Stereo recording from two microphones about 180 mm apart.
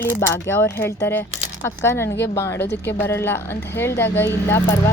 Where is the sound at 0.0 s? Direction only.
10° left (ahead or behind).